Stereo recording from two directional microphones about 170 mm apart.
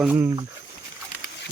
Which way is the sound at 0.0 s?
10° right (ahead or behind).